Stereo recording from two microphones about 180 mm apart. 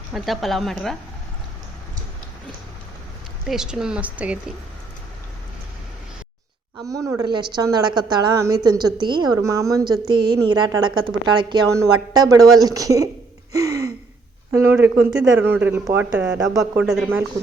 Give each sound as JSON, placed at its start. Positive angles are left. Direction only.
{"t": 0.1, "sound": "speech", "side_deg": 0}
{"t": 3.4, "sound": "speech", "side_deg": -5}
{"t": 6.8, "sound": "a woman's voice", "side_deg": -20}
{"t": 13.5, "sound": "gasp", "side_deg": -20}
{"t": 14.5, "sound": "speech", "side_deg": -15}
{"t": 16.5, "sound": "speech", "side_deg": -20}
{"t": 16.8, "sound": "speech", "side_deg": 0}